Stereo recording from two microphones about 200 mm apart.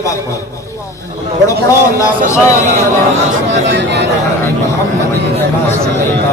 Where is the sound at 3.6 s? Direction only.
60° right (ahead or behind).